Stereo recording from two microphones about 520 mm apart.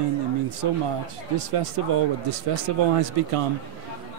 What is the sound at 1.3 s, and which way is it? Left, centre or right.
Speech, right.